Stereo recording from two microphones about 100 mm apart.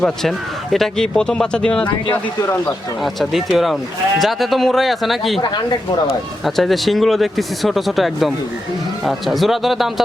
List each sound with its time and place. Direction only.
0.0 s speech: 5° left (ahead or behind)
3.0 s speech: centre (ahead or behind)
5.4 s speech: 45° left (ahead or behind)
6.4 s speech: centre (ahead or behind)